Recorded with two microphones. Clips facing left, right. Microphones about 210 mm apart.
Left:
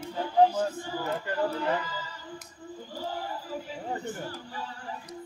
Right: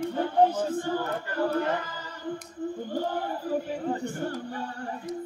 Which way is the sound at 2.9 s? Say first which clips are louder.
Right 3 dB; 55° right (ahead or behind).